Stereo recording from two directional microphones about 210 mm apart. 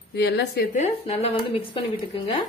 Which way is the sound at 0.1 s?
50° left (ahead or behind).